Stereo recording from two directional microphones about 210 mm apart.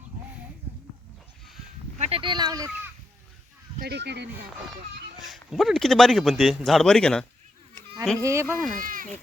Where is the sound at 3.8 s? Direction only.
55° right (ahead or behind).